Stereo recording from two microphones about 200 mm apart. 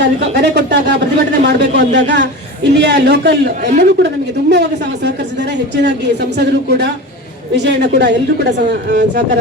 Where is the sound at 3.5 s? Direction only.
40° right (ahead or behind).